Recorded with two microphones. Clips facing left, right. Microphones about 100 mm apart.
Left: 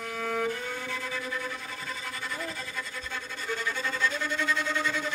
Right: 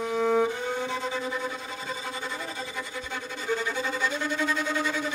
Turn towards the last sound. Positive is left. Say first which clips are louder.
# right 2 dB
turn(degrees=-10)  # may be behind; listen again after turning